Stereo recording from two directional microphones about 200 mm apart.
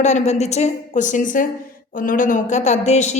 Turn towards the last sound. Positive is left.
turn(degrees=35)  # may be behind; listen again after turning